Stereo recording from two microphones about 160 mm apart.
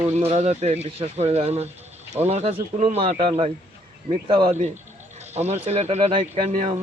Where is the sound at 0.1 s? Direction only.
40° right (ahead or behind).